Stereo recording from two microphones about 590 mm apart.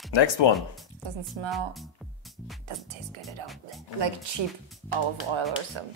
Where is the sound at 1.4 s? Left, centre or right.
Right.